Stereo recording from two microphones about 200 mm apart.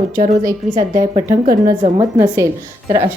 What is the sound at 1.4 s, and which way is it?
Speech, 40° right (ahead or behind).